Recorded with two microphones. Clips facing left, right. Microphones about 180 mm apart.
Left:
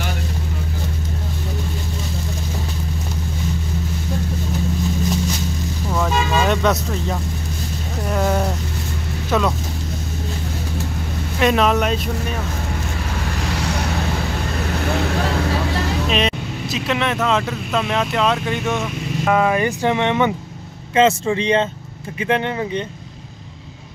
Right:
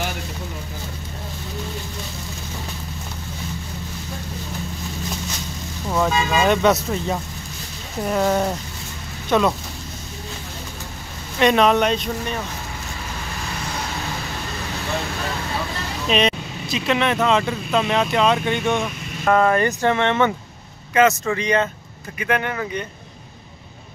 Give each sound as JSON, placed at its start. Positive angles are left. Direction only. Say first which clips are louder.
{"t": 5.9, "sound": "vehicle", "louder": "right 1 dB", "side_deg": -5}
{"t": 8.1, "sound": "speech", "louder": "right 1 dB", "side_deg": 0}
{"t": 11.3, "sound": "speech", "louder": "right 1 dB", "side_deg": 0}
{"t": 16.1, "sound": "speech", "louder": "right 1 dB", "side_deg": 0}
{"t": 20.9, "sound": "speech", "louder": "left 2 dB", "side_deg": 25}